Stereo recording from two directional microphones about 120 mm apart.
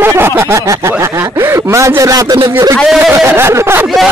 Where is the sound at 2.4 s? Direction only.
25° right (ahead or behind).